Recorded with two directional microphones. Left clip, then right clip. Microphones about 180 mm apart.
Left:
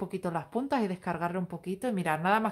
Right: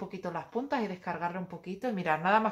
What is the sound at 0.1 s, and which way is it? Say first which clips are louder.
Speech: even; 55° left (ahead or behind).